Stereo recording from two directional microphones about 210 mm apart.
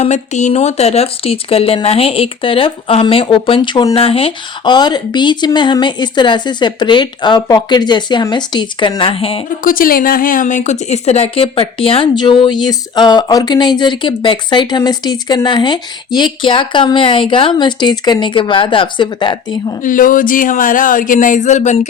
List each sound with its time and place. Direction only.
0.0 s speech: 35° left (ahead or behind)
9.6 s speech: 45° left (ahead or behind); by 19.7 s 20° left (ahead or behind)
19.8 s speech: 40° left (ahead or behind)